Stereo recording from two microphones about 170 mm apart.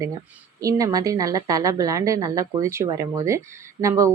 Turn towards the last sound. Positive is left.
turn(degrees=-20)  # may be behind; listen again after turning